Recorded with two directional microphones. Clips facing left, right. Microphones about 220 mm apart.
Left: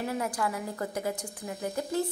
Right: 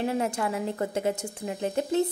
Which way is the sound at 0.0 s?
25° right (ahead or behind).